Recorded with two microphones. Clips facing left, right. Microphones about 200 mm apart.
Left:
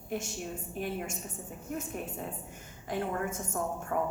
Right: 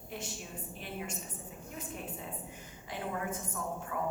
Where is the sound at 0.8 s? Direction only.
50° left (ahead or behind).